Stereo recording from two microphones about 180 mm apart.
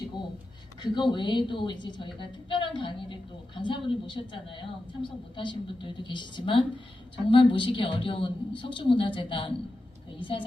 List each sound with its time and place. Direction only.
0.8 s a woman's voice: 25° left (ahead or behind)